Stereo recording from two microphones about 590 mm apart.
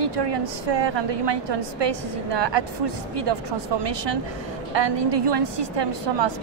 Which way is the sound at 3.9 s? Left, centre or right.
Right.